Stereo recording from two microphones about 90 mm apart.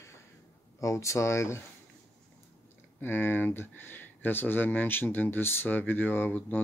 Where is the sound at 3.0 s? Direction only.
25° left (ahead or behind).